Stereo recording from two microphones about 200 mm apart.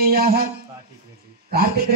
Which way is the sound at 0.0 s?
50° right (ahead or behind).